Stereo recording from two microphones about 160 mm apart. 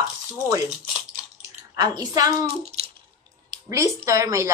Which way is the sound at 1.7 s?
25° right (ahead or behind).